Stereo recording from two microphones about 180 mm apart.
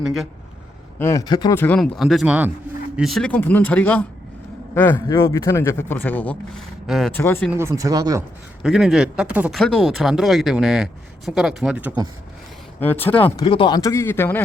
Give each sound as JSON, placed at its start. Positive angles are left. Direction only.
{"t": 0.0, "sound": "speech", "side_deg": 0}
{"t": 0.9, "sound": "speech", "side_deg": 15}
{"t": 1.5, "sound": "a man's voice", "side_deg": 10}
{"t": 6.8, "sound": "speech", "side_deg": 0}
{"t": 7.1, "sound": "a man's voice", "side_deg": 10}
{"t": 7.5, "sound": "speech", "side_deg": -15}
{"t": 8.6, "sound": "speech", "side_deg": 0}
{"t": 12.8, "sound": "a man's voice", "side_deg": 10}
{"t": 13.4, "sound": "a man's voice", "side_deg": 25}